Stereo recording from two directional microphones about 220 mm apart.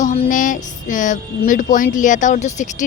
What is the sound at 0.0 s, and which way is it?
Speech, 35° left (ahead or behind).